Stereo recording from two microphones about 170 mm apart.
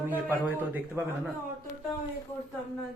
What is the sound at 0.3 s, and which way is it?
Speech, 10° right (ahead or behind).